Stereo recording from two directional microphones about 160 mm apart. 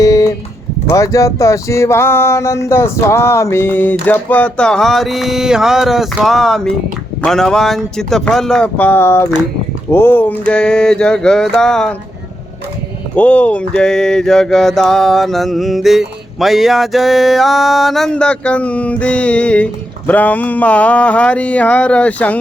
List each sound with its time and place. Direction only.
0.0 s a sound: 20° left (ahead or behind)
4.0 s mantra: 10° left (ahead or behind)
13.1 s mantra: 10° left (ahead or behind)